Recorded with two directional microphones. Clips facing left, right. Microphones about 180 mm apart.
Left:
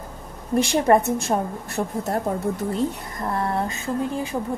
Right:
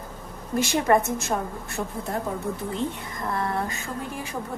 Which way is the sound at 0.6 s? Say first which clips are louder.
Left 3 dB; 30° left (ahead or behind).